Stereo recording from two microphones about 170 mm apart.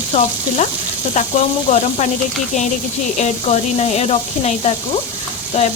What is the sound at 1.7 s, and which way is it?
Sizzle, 45° left (ahead or behind).